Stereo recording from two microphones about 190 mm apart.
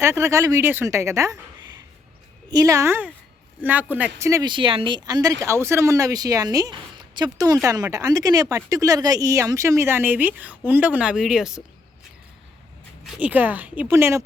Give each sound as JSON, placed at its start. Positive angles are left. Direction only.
{"t": 0.0, "sound": "speech", "side_deg": -15}
{"t": 2.5, "sound": "a woman's voice", "side_deg": -20}
{"t": 13.1, "sound": "speech", "side_deg": -5}